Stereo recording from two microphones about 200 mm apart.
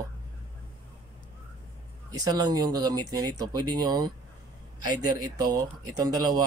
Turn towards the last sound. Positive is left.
turn(degrees=-20)  # may be behind; listen again after turning